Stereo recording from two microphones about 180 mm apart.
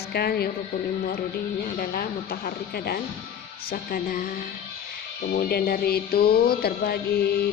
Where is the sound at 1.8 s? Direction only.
55° left (ahead or behind).